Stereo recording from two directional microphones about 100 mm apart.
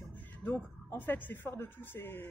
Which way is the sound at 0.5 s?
20° left (ahead or behind).